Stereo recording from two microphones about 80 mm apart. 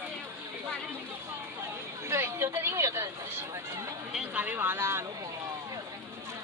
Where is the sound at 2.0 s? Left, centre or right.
Right.